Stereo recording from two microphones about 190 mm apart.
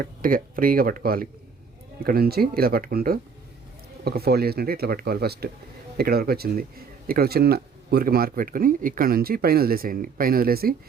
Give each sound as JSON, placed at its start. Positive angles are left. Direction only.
{"t": 0.0, "sound": "speech", "side_deg": -45}